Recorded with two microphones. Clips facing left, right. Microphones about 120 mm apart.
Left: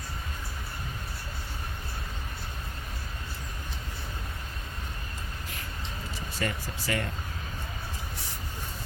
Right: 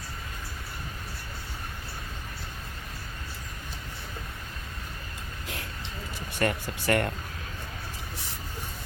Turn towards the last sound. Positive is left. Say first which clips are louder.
# right 6 dB
turn(degrees=-60)  # may be behind; listen again after turning